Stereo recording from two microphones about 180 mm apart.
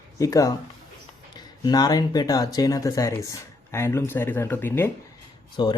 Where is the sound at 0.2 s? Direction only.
20° left (ahead or behind).